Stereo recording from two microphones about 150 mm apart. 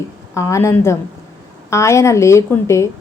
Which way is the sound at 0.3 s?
20° left (ahead or behind).